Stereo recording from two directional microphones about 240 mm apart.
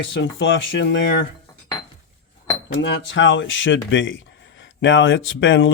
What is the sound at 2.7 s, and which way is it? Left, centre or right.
Speech, left.